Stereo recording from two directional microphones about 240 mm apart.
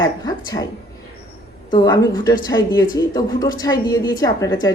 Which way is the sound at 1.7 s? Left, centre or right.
Centre.